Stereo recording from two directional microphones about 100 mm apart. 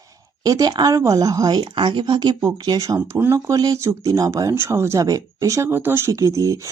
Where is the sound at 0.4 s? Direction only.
40° right (ahead or behind).